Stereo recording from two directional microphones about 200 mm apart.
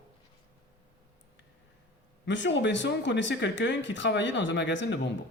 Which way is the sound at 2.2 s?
65° left (ahead or behind).